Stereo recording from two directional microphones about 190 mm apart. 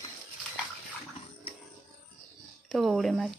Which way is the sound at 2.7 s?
Centre (ahead or behind).